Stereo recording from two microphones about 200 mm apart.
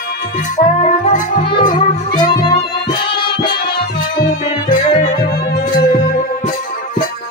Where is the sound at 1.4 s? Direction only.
25° left (ahead or behind).